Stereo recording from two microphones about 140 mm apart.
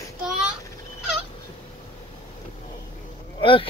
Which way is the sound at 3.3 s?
40° left (ahead or behind).